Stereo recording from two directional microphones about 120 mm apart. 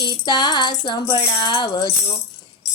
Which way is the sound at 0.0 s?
40° left (ahead or behind).